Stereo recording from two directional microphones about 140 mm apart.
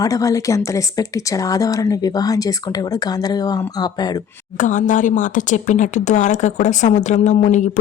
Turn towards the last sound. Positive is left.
turn(degrees=60)  # may be behind; listen again after turning